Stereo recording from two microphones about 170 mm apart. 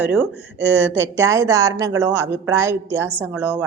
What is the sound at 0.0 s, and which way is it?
Speech, 5° right (ahead or behind).